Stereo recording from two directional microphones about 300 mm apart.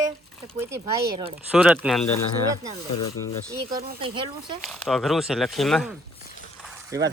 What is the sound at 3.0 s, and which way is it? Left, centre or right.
Speech, left.